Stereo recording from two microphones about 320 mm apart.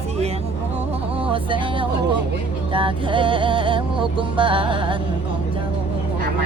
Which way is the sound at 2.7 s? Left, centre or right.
Centre.